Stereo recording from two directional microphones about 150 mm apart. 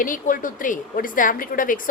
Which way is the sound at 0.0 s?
65° left (ahead or behind).